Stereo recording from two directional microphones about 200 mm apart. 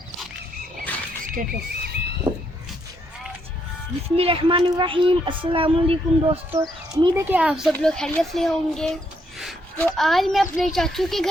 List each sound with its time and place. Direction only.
1.2 s a sound: 45° right (ahead or behind)
4.2 s speech: 25° right (ahead or behind)
6.5 s speech: 15° right (ahead or behind); by 11.3 s centre (ahead or behind)